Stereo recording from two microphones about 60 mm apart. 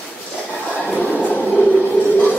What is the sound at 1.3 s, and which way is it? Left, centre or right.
Train, centre.